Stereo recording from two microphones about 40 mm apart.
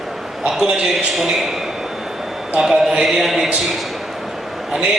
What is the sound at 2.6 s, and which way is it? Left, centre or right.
Speech, centre.